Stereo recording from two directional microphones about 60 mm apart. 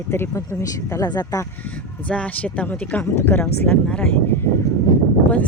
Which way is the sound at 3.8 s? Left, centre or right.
Centre.